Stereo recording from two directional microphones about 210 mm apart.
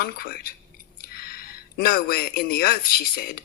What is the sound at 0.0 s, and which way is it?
A man's voice, 45° left (ahead or behind).